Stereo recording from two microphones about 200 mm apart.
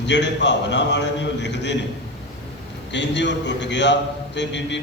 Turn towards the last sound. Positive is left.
turn(degrees=60)  # may be behind; listen again after turning